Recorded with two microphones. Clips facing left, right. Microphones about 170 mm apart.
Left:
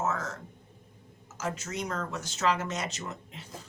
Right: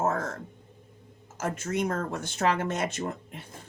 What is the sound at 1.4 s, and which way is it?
Speech, 55° right (ahead or behind).